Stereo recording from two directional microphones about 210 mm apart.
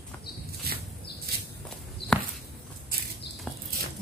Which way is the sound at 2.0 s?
50° left (ahead or behind).